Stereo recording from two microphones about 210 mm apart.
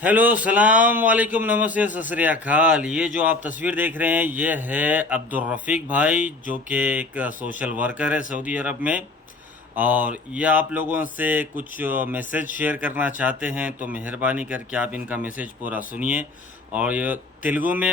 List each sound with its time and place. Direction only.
0.0 s speech: 10° right (ahead or behind)